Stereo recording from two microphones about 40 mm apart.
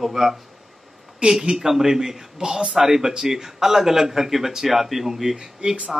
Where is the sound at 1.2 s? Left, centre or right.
Centre.